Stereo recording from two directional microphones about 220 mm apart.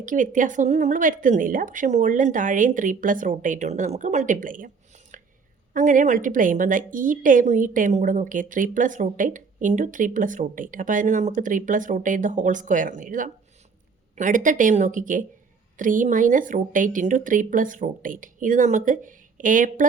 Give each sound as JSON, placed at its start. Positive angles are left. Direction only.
{"t": 0.0, "sound": "a woman's voice", "side_deg": -35}
{"t": 5.1, "sound": "a sound", "side_deg": -35}
{"t": 5.7, "sound": "a woman's voice", "side_deg": -35}